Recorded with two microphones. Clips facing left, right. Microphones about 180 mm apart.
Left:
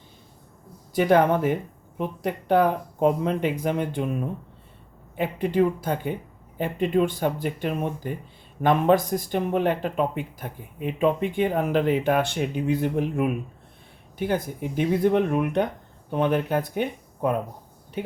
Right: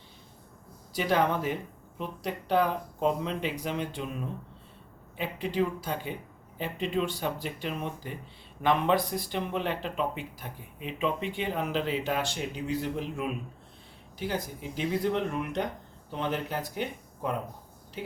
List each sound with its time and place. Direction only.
0.9 s speech: 50° left (ahead or behind)